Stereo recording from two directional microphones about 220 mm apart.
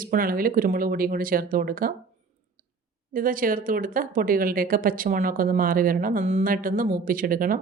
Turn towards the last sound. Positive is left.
turn(degrees=-40)  # may be behind; listen again after turning